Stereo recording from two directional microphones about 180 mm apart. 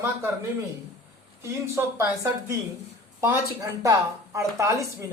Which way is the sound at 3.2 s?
20° right (ahead or behind).